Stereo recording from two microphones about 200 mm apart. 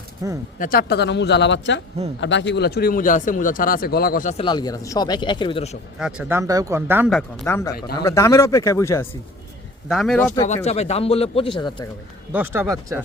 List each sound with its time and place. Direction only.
0.6 s speech: 45° left (ahead or behind)
4.4 s speech: 20° left (ahead or behind)
6.0 s speech: 5° right (ahead or behind)
7.1 s speech: 5° left (ahead or behind)
9.9 s speech: centre (ahead or behind)
10.4 s speech: 35° left (ahead or behind)
12.3 s speech: 10° right (ahead or behind)